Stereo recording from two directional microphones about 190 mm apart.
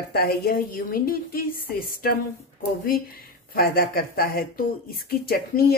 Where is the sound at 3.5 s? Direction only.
50° left (ahead or behind).